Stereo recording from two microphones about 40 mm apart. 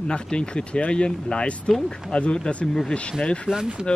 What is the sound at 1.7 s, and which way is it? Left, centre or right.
Speech, centre.